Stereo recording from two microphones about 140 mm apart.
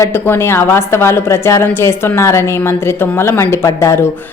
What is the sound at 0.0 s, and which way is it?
A woman's voice, 15° left (ahead or behind).